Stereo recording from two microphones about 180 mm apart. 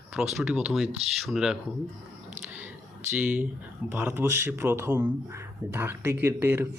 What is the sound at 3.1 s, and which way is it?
A man's voice, 10° right (ahead or behind).